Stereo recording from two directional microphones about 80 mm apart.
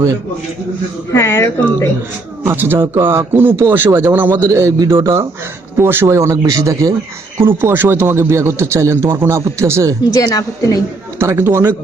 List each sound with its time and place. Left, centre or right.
1.1 s speech: left
2.4 s a man's voice: right
7.3 s a man's voice: right
10.1 s a woman's voice: left
11.2 s a man's voice: right